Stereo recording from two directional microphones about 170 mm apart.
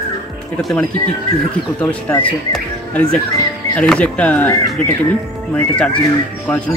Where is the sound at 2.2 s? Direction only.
5° left (ahead or behind).